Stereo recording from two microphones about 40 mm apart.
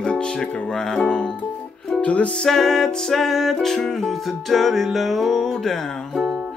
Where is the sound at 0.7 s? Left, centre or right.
Centre.